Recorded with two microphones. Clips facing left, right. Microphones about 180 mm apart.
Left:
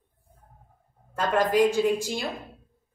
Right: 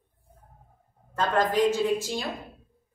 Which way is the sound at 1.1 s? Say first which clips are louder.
Left 2 dB; 10° left (ahead or behind).